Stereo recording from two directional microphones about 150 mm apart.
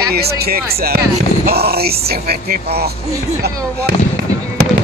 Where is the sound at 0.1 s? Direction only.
90° right.